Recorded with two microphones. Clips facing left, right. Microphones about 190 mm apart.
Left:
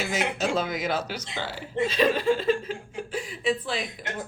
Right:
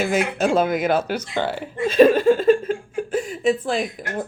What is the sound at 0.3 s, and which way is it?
A woman's voice, 55° right (ahead or behind).